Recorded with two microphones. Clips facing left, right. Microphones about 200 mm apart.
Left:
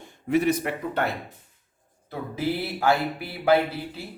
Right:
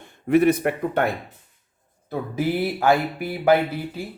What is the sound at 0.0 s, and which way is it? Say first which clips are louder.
Speech: right 5 dB; 60° right (ahead or behind).